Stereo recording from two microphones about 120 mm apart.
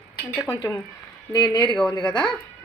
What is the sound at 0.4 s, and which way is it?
A woman's voice, 35° left (ahead or behind).